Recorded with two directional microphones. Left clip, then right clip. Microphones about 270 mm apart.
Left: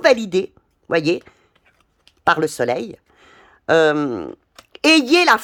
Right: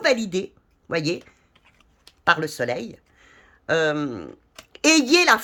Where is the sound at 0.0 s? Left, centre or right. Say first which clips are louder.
Left 6 dB; centre.